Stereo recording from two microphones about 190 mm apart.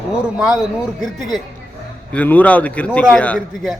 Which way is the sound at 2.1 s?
10° left (ahead or behind).